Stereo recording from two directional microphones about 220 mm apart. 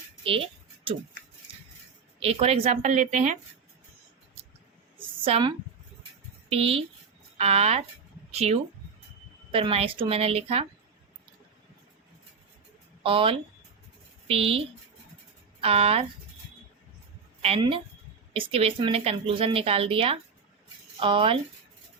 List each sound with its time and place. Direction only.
2.2 s a woman's voice: 25° right (ahead or behind)
4.9 s a sound: 25° right (ahead or behind)
6.5 s a woman's voice: 25° right (ahead or behind)
13.0 s a woman's voice: 25° right (ahead or behind)
15.6 s a woman's voice: 25° right (ahead or behind)
17.4 s a woman's voice: 25° right (ahead or behind)